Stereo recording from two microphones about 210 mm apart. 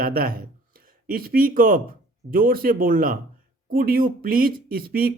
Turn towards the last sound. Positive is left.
turn(degrees=-45)  # may be behind; listen again after turning